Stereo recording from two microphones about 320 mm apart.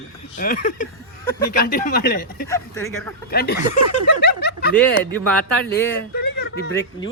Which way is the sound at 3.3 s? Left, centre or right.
Left.